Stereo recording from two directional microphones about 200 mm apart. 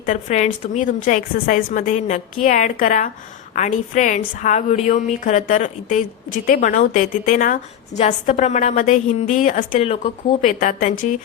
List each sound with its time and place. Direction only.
0.0 s a woman's voice: 40° left (ahead or behind)
10.4 s a woman's voice: 45° left (ahead or behind)